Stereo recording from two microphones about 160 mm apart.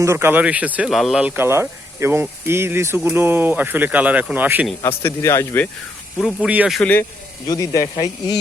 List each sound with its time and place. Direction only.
0.0 s speech: 15° right (ahead or behind)
4.8 s speech: 15° left (ahead or behind)
6.1 s speech: 5° right (ahead or behind)
6.7 s speech: 10° left (ahead or behind)
7.4 s speech: 20° left (ahead or behind)